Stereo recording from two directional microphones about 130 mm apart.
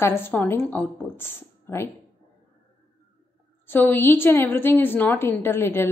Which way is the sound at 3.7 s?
15° left (ahead or behind).